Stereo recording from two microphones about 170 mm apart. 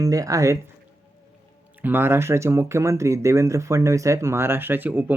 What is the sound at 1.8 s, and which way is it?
Speech, 10° right (ahead or behind).